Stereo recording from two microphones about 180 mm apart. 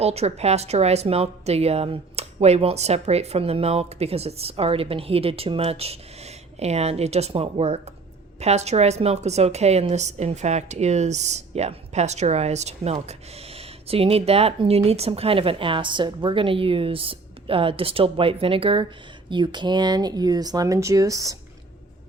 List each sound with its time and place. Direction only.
0.0 s speech: 35° right (ahead or behind); by 21.3 s 20° right (ahead or behind)